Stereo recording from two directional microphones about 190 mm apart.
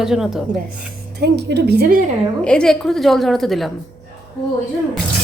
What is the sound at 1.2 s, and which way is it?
Speech, 60° right (ahead or behind).